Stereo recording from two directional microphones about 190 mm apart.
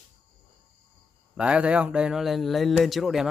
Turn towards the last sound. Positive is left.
turn(degrees=0)  # may be behind; listen again after turning